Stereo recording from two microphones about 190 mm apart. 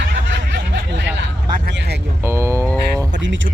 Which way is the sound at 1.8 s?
60° right (ahead or behind).